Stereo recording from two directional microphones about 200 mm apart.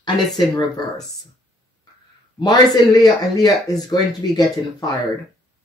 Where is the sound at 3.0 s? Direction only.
20° left (ahead or behind).